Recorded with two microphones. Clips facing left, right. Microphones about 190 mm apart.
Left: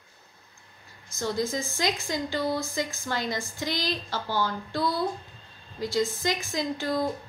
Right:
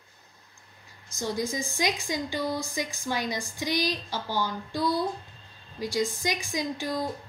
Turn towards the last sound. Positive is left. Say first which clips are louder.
# left 1 dB
turn(degrees=-15)  # may be behind; listen again after turning